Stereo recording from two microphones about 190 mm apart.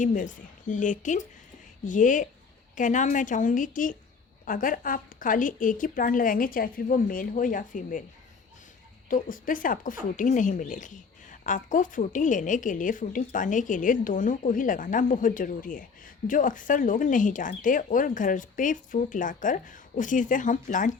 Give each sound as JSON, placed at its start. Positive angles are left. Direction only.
{"t": 0.0, "sound": "speech", "side_deg": 45}
{"t": 9.0, "sound": "speech", "side_deg": 45}